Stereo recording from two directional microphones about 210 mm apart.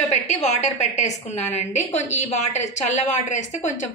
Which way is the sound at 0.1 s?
30° left (ahead or behind).